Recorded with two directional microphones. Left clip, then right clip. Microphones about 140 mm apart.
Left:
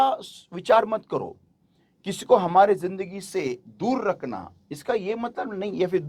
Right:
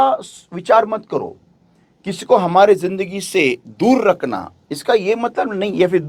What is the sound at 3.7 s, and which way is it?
Speech, 90° right.